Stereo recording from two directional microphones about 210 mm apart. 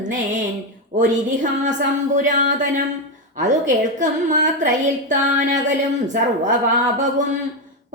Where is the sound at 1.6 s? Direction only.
35° right (ahead or behind).